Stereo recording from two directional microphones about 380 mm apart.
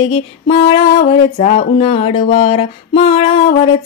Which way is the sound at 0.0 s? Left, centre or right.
Centre.